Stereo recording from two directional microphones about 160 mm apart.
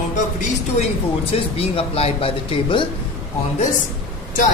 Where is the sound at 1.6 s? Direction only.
35° left (ahead or behind).